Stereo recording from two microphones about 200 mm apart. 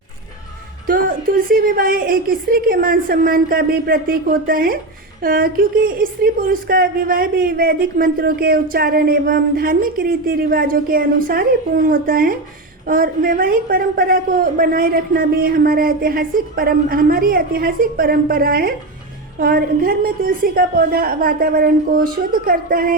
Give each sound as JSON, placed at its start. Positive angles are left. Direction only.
{"t": 0.9, "sound": "speech", "side_deg": -45}